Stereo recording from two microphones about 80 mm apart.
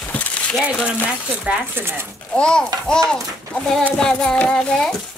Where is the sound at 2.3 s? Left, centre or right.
Centre.